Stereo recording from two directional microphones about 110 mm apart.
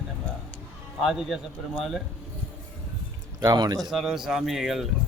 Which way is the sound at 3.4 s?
40° right (ahead or behind).